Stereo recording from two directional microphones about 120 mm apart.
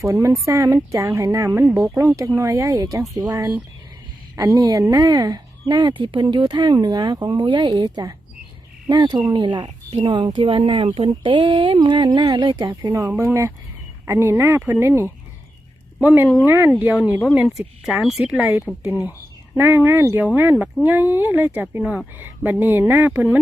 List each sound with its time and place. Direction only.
0.0 s speech: 25° right (ahead or behind)
13.1 s speech: 15° right (ahead or behind)
19.5 s speech: 15° right (ahead or behind)